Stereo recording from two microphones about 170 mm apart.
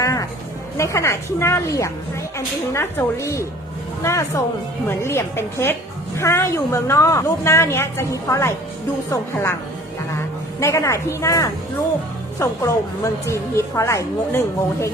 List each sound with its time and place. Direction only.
0.0 s music: 20° left (ahead or behind)
0.8 s a woman's voice: 15° left (ahead or behind)
10.6 s a woman's voice: 15° left (ahead or behind)